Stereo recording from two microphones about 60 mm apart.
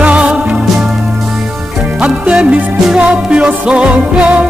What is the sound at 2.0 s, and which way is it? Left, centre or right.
Music, centre.